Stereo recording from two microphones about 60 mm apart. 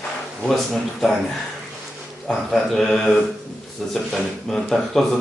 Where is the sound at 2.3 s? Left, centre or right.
Centre.